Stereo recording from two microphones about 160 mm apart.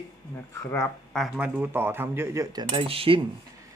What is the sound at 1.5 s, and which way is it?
Speech, 15° right (ahead or behind).